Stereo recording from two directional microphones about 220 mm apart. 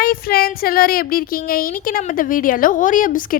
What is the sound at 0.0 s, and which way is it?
Child singing, 45° left (ahead or behind).